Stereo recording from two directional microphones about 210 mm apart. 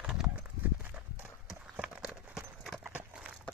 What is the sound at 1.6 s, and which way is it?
Clip-clop, 5° right (ahead or behind).